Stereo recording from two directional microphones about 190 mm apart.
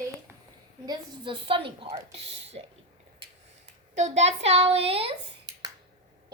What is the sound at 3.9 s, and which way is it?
A child's voice, 35° right (ahead or behind).